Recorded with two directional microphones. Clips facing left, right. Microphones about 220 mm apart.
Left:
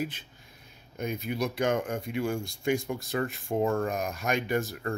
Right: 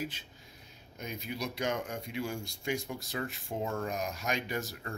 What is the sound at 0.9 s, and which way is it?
Speech, 55° left (ahead or behind).